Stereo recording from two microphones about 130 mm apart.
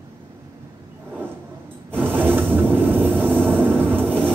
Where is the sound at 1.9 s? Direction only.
15° right (ahead or behind).